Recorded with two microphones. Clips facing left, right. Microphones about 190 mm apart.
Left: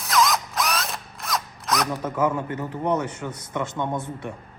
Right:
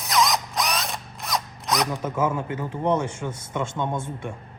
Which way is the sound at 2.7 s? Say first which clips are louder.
Right 2 dB; 25° right (ahead or behind).